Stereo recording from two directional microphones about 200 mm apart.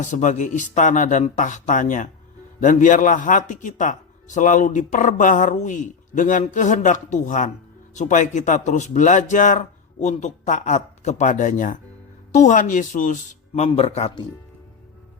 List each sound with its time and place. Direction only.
0.0 s speech: 40° left (ahead or behind)